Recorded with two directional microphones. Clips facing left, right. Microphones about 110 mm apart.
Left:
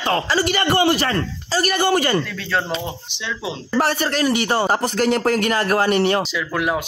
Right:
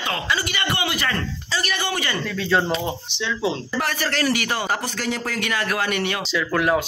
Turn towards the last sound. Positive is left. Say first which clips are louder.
# right 1 dB
turn(degrees=5)  # may be behind; listen again after turning